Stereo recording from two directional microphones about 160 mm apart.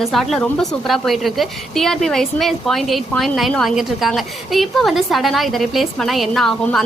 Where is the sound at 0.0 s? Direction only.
Centre (ahead or behind).